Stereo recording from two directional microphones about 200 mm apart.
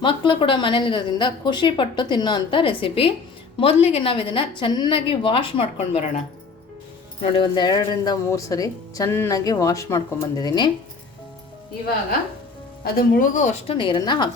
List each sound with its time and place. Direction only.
0.0 s a woman's voice: 25° left (ahead or behind)
7.2 s speech: 20° left (ahead or behind)
12.8 s a woman's voice: 45° left (ahead or behind)
13.7 s a woman's voice: 25° left (ahead or behind)